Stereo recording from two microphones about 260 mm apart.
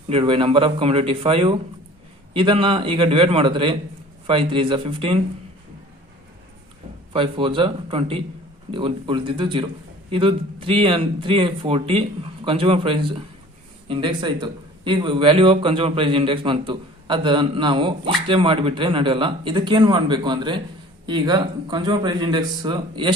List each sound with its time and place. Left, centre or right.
0.1 s a man's voice: centre
7.1 s a man's voice: right